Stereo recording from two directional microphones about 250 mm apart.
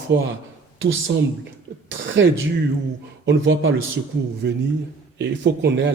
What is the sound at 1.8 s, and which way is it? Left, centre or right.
A man's voice, right.